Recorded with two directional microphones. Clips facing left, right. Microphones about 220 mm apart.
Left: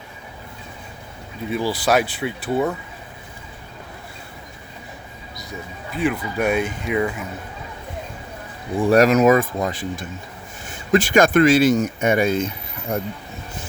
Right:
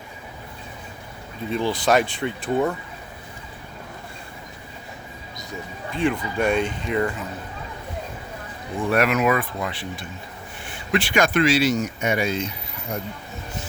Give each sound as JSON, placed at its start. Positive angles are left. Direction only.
{"t": 1.5, "sound": "speech", "side_deg": 5}
{"t": 5.9, "sound": "speech", "side_deg": 5}
{"t": 8.9, "sound": "speech", "side_deg": 40}